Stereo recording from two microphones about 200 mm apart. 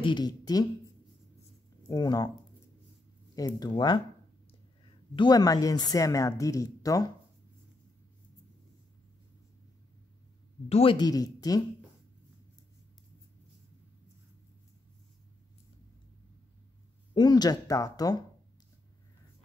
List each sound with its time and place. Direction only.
0.0 s speech: 20° left (ahead or behind)
1.9 s speech: 20° left (ahead or behind)
3.3 s speech: 20° left (ahead or behind)
5.1 s a woman's voice: 20° left (ahead or behind)
10.7 s speech: 25° left (ahead or behind)
17.1 s speech: 20° left (ahead or behind)